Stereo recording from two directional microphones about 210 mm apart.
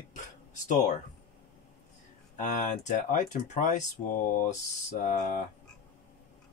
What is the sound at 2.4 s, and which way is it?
Speech, 35° left (ahead or behind).